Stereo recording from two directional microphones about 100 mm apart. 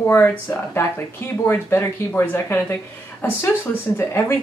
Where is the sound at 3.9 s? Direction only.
25° left (ahead or behind).